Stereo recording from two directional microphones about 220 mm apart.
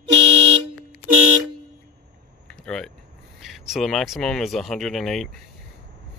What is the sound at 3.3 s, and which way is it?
Speech, centre (ahead or behind).